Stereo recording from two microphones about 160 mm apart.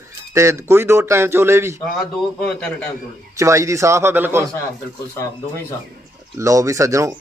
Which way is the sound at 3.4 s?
20° right (ahead or behind).